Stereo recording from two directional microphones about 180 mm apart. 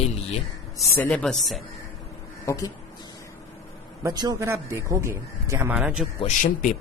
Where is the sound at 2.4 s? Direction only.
15° left (ahead or behind).